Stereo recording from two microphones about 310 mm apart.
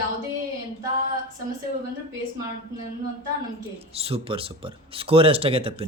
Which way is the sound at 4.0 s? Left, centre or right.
Centre.